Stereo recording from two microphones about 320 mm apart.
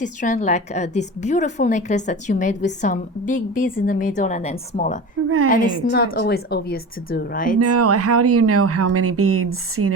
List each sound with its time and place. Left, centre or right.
0.0 s a woman's voice: left
7.6 s speech: right